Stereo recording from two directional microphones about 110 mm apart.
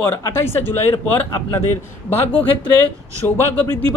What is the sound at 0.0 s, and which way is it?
A man's voice, 20° left (ahead or behind).